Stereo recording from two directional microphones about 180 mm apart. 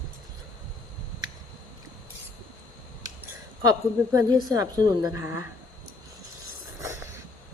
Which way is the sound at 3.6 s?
20° right (ahead or behind).